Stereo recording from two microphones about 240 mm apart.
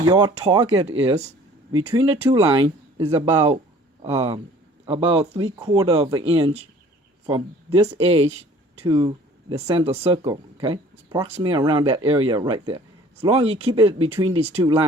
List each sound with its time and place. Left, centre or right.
0.0 s speech: centre
1.8 s speech: right